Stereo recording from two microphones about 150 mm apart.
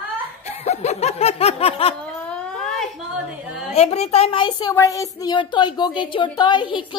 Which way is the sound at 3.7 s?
45° left (ahead or behind).